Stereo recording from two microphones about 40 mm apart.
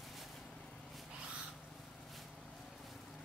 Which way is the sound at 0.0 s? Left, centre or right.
Centre.